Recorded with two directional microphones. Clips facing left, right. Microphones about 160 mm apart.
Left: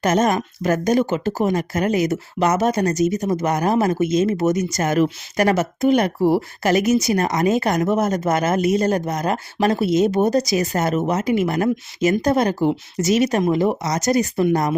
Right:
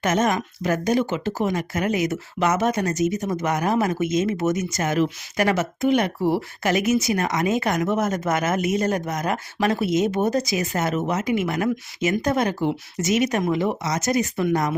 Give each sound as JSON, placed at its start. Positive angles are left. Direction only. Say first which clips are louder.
{"t": 0.0, "sound": "speech", "louder": "left 3 dB", "side_deg": 35}